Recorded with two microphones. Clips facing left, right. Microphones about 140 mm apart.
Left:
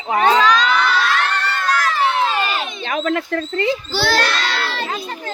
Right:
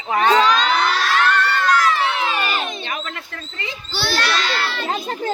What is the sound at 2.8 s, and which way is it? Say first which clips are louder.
Speech: left 9 dB; 90° left.